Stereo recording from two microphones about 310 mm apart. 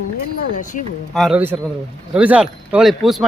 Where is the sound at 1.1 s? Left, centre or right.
Centre.